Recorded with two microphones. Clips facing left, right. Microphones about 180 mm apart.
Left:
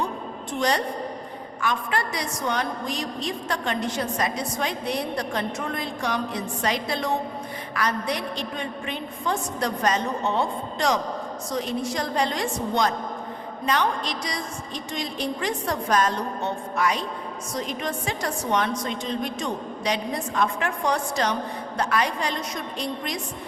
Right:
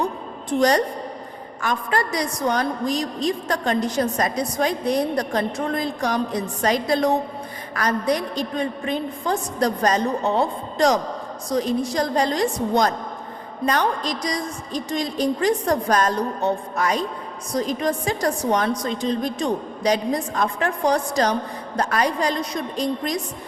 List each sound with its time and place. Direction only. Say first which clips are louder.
1.6 s a woman's voice: right 3 dB; 40° right (ahead or behind)